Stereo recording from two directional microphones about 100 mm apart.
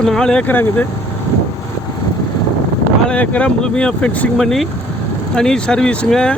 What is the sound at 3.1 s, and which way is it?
Speech, 10° left (ahead or behind).